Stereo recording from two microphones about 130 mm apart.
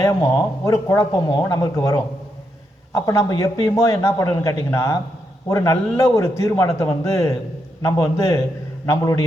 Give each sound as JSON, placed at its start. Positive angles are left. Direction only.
{"t": 0.0, "sound": "speech", "side_deg": 30}